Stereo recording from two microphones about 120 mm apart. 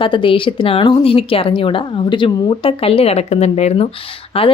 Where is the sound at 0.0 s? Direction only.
45° left (ahead or behind); by 3.8 s 65° left (ahead or behind).